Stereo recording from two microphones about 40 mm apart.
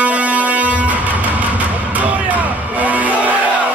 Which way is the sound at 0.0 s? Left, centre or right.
Right.